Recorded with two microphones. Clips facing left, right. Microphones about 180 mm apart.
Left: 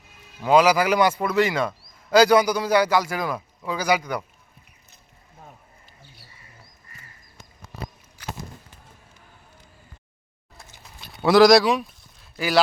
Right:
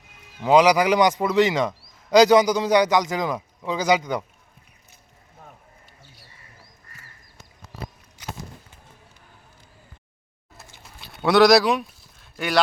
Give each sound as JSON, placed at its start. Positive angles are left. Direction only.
{"t": 0.4, "sound": "a man's voice", "side_deg": -15}
{"t": 11.2, "sound": "speech", "side_deg": 0}